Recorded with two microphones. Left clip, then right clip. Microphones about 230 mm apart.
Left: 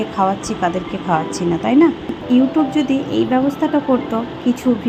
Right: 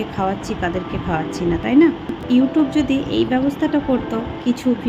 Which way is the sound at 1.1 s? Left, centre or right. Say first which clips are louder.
Left 4 dB; centre.